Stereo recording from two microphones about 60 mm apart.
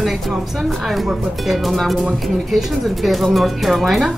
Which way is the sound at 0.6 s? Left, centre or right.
Centre.